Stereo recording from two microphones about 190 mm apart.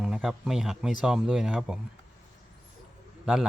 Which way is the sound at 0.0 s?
5° right (ahead or behind).